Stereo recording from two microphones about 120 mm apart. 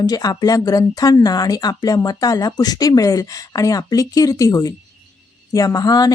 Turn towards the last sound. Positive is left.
turn(degrees=30)  # may be behind; listen again after turning